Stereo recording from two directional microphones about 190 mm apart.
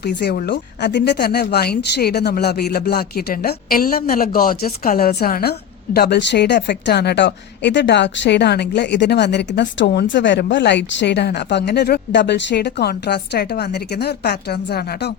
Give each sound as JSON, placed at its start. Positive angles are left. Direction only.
{"t": 0.0, "sound": "speech", "side_deg": 60}